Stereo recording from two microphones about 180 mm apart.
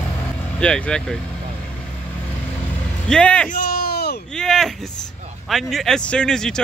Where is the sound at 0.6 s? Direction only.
5° left (ahead or behind).